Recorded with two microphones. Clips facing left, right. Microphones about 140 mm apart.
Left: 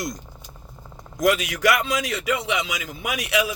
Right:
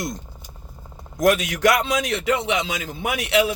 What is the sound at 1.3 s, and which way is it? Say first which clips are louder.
A man's voice: right 2 dB; 25° right (ahead or behind).